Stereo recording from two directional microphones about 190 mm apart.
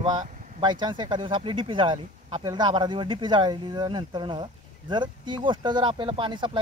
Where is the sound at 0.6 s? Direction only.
25° right (ahead or behind).